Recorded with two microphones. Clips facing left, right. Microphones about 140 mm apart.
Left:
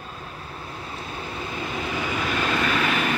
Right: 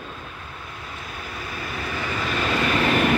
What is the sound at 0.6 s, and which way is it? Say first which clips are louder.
Vehicle: left 3 dB; 30° left (ahead or behind).